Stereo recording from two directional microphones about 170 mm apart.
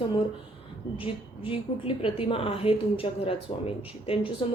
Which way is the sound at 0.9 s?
30° left (ahead or behind).